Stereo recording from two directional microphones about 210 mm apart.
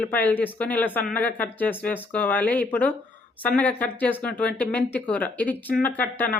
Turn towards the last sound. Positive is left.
turn(degrees=10)  # may be behind; listen again after turning